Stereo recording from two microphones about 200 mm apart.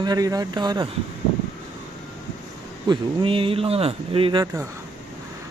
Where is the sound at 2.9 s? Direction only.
25° right (ahead or behind).